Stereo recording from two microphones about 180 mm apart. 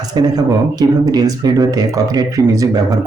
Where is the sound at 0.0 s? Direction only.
20° right (ahead or behind).